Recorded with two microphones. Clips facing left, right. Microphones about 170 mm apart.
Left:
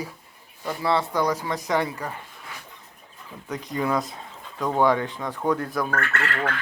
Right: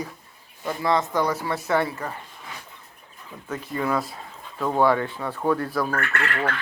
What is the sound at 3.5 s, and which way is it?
Speech, 15° left (ahead or behind).